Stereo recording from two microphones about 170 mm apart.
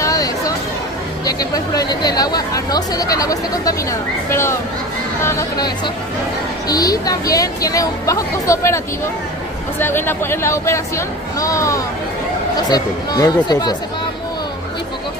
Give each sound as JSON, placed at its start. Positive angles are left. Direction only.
{"t": 0.0, "sound": "chatter", "side_deg": 20}
{"t": 1.2, "sound": "speech", "side_deg": 20}
{"t": 6.7, "sound": "speech", "side_deg": 20}